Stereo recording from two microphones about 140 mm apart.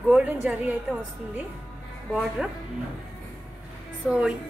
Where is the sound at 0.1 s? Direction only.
10° right (ahead or behind).